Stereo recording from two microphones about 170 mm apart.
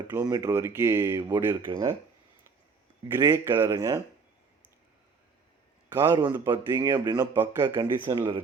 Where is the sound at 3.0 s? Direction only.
20° right (ahead or behind).